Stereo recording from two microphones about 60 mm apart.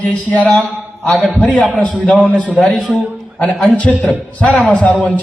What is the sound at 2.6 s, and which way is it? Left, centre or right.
A man's voice, centre.